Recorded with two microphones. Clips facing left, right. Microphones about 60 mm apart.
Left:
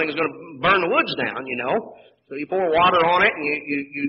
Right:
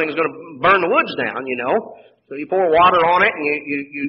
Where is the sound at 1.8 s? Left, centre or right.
Right.